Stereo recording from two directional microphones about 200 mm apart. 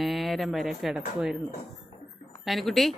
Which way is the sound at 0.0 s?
Centre (ahead or behind).